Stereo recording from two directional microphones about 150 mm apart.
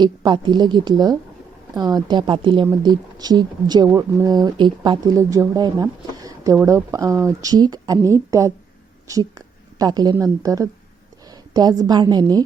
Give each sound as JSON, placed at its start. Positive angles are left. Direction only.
{"t": 0.0, "sound": "speech", "side_deg": -30}